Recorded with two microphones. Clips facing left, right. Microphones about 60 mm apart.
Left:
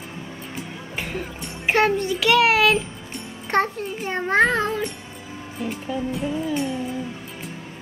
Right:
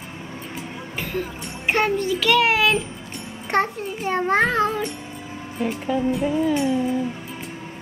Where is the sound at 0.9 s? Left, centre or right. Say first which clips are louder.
Right 2 dB; centre.